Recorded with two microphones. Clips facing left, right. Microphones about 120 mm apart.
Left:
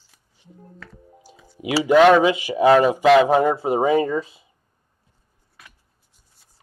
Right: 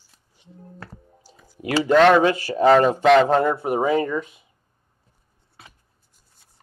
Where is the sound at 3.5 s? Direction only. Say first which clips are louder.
Left 2 dB; 25° left (ahead or behind).